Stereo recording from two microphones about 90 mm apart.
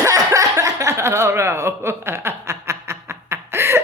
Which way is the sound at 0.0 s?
40° right (ahead or behind).